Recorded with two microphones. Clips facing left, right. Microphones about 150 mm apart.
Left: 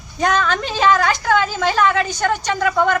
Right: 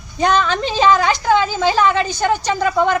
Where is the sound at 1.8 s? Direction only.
30° right (ahead or behind).